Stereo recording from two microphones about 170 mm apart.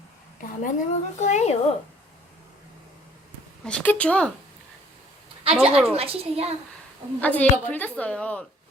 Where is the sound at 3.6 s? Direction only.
5° left (ahead or behind).